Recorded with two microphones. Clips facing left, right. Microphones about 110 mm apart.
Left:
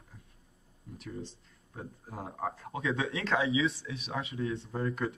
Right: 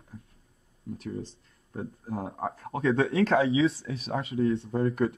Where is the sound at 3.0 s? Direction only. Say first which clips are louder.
Right 7 dB; 35° right (ahead or behind).